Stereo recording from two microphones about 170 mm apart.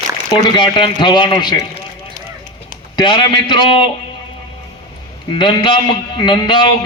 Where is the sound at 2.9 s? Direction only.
25° left (ahead or behind).